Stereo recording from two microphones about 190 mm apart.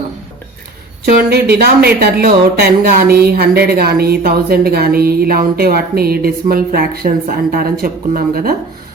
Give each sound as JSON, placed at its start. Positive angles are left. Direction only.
{"t": 1.0, "sound": "speech", "side_deg": -55}